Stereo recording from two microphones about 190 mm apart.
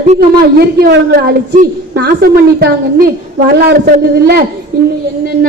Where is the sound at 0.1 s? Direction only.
50° right (ahead or behind).